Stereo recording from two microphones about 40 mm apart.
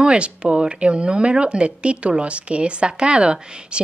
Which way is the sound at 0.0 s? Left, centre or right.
Right.